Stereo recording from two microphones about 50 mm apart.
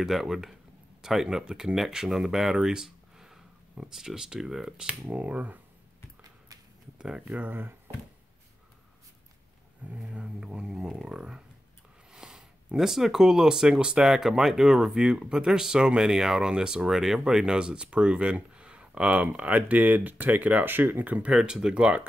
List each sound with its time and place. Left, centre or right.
0.0 s speech: centre
5.1 s speech: right
7.0 s speech: centre
7.3 s speech: right
9.8 s speech: right
21.3 s speech: centre